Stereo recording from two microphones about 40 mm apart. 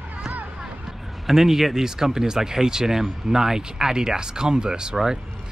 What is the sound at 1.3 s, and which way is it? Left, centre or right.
Speech, centre.